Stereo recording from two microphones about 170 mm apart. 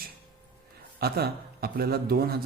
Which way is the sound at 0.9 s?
70° right (ahead or behind).